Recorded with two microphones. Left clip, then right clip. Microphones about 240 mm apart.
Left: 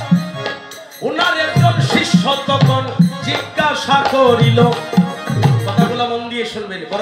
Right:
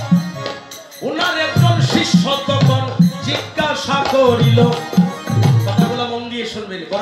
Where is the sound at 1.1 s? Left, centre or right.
Left.